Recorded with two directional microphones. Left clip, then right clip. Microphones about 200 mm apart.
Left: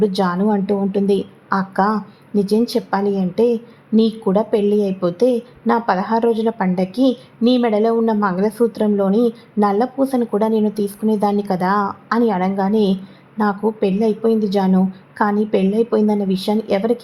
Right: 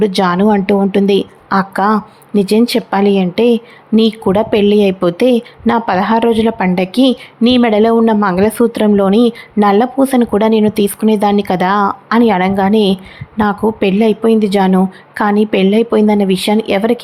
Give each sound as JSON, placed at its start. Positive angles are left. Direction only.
{"t": 0.0, "sound": "a woman's voice", "side_deg": -20}